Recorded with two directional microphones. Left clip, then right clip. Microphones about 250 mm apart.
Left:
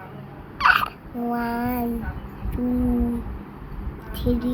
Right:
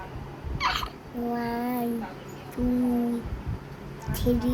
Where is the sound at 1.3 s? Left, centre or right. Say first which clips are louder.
Left 4 dB; centre.